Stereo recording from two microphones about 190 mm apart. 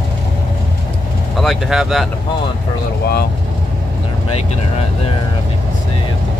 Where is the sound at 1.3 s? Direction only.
Centre (ahead or behind).